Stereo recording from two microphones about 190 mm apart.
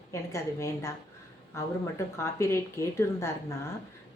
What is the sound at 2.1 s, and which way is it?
Speech, 15° left (ahead or behind).